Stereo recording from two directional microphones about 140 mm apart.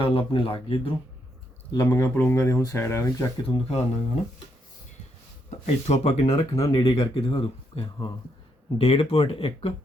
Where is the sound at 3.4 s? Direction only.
50° left (ahead or behind).